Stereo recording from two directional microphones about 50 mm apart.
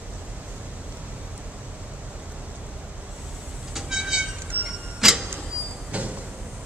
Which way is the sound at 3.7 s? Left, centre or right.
Centre.